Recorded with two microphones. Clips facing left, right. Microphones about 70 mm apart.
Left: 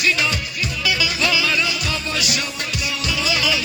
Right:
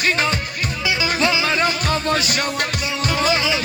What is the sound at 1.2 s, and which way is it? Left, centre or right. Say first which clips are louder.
Music: right 2 dB; right.